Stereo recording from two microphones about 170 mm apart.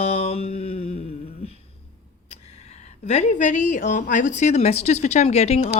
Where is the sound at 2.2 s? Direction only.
40° left (ahead or behind).